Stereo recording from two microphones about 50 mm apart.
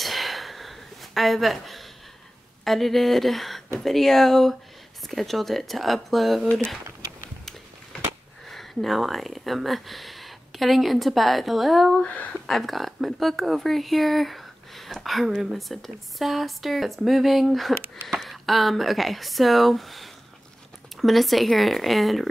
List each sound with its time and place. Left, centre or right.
0.0 s a sound: centre
2.6 s speech: centre
8.5 s speech: centre
12.0 s speech: left
12.4 s speech: centre